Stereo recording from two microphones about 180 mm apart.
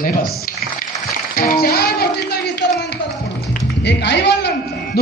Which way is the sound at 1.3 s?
55° left (ahead or behind).